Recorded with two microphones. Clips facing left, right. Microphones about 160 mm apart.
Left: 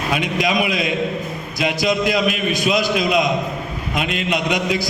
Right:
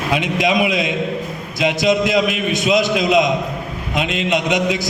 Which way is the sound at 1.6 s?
20° right (ahead or behind).